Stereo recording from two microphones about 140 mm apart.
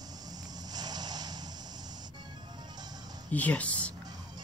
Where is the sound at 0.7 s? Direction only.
30° right (ahead or behind).